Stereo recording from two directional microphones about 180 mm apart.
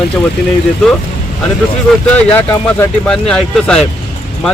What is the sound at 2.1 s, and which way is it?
Speech, 10° left (ahead or behind).